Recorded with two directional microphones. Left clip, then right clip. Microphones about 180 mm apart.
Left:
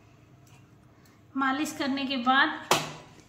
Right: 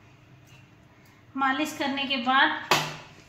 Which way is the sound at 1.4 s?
5° right (ahead or behind).